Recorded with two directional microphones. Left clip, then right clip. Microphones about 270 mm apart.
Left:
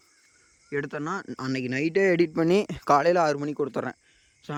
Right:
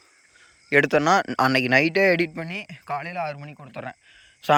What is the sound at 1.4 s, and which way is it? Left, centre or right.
A man's voice, centre.